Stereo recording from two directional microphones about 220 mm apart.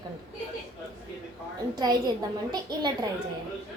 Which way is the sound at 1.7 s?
20° right (ahead or behind).